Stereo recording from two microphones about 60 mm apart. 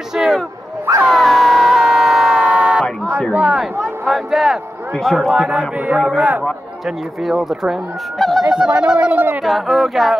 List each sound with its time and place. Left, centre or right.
0.1 s a sound: centre
2.4 s a sound: centre
3.8 s speech: centre
5.3 s speech: centre
7.2 s speech: centre
8.5 s speech: centre
9.4 s speech: centre